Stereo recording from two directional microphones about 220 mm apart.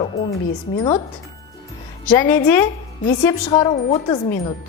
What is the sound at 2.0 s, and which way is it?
Speech, 10° left (ahead or behind).